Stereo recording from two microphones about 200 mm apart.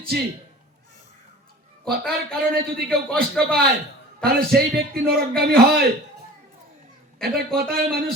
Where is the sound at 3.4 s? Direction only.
5° left (ahead or behind).